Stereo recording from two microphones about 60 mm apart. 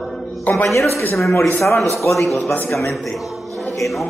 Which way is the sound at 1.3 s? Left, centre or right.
Left.